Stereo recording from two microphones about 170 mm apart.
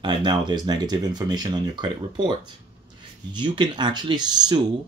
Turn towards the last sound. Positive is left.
turn(degrees=-25)  # may be behind; listen again after turning